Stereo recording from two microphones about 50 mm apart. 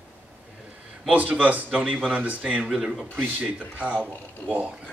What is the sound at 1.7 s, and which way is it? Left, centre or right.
A man's voice, centre.